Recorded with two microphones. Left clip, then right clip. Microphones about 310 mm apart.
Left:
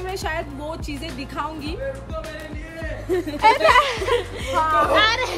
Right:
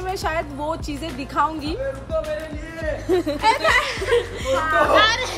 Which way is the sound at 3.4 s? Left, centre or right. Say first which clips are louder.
Left 5 dB; left.